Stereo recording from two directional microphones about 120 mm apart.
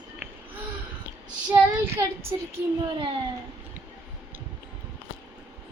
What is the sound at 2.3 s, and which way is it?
Speech, 30° right (ahead or behind).